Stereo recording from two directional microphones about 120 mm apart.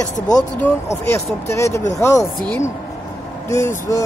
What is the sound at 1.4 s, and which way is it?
Speech, 25° left (ahead or behind).